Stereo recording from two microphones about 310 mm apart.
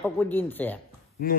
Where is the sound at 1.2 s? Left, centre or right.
Left.